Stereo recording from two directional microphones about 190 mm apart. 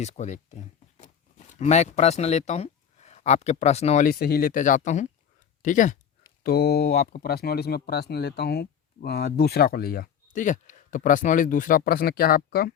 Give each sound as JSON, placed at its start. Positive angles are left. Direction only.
{"t": 0.0, "sound": "speech", "side_deg": 35}
{"t": 6.4, "sound": "speech", "side_deg": 55}